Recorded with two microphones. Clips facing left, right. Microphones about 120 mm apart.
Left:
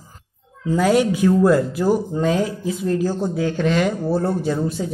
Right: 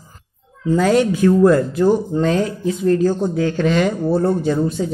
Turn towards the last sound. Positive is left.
turn(degrees=5)  # may be behind; listen again after turning